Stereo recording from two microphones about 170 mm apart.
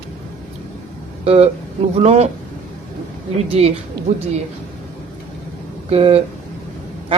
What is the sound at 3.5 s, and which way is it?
Speech, 35° right (ahead or behind).